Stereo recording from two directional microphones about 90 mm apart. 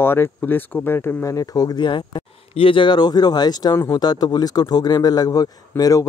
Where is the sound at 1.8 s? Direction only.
65° left (ahead or behind).